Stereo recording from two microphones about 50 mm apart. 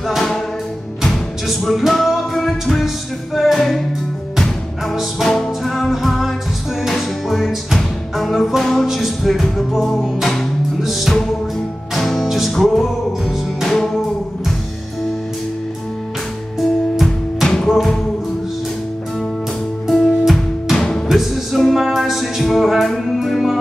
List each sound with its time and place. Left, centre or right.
1.5 s music: centre
5.2 s music: centre
12.5 s music: centre
16.9 s music: centre
19.9 s music: centre
20.7 s music: centre
21.1 s music: centre